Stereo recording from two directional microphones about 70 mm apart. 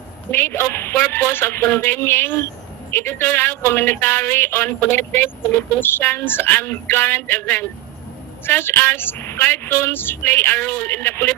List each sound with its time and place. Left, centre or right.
0.3 s a woman's voice: left